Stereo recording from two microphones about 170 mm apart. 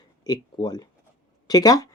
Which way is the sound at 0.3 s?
25° left (ahead or behind).